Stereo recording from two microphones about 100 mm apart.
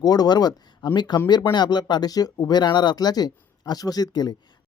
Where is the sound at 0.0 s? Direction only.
40° left (ahead or behind).